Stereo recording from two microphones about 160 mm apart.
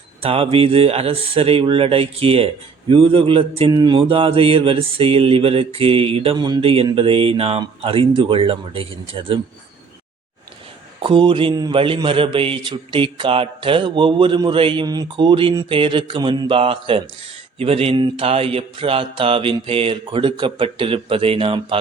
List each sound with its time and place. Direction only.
0.2 s a man's voice: 35° right (ahead or behind)
11.0 s a man's voice: 30° right (ahead or behind)